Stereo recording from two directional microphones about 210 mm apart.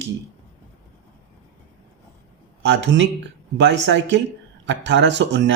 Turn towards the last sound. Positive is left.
turn(degrees=-60)  # may be behind; listen again after turning